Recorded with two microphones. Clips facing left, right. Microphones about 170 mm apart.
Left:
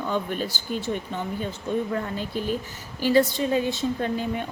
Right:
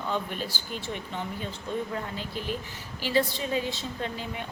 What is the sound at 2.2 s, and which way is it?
A woman's voice, 45° left (ahead or behind).